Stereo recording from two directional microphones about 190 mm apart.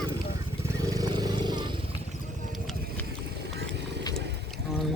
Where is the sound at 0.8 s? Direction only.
20° right (ahead or behind).